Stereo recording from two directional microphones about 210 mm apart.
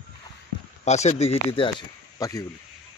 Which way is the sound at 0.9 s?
30° left (ahead or behind).